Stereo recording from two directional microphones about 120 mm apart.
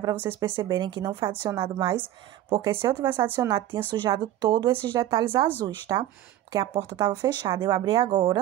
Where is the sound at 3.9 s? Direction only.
40° right (ahead or behind).